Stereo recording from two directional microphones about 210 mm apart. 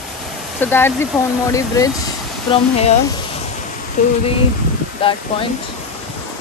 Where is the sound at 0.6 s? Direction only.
10° left (ahead or behind).